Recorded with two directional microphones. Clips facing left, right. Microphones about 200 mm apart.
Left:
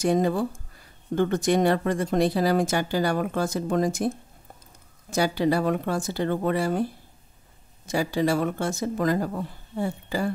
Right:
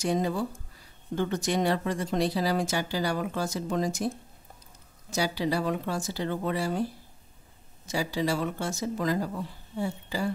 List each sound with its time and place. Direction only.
0.0 s speech: 55° left (ahead or behind)
5.1 s speech: 55° left (ahead or behind)